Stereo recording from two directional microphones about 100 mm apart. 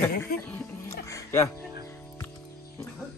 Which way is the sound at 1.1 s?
30° left (ahead or behind).